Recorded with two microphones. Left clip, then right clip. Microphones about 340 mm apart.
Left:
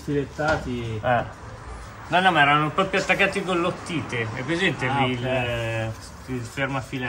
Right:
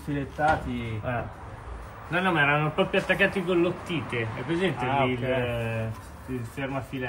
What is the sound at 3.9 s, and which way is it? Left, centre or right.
Speech, left.